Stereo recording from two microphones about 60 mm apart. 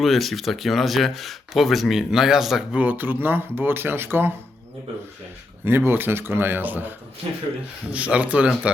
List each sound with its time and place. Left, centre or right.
0.0 s speech: centre
2.7 s speech: right
5.6 s speech: right
7.9 s speech: right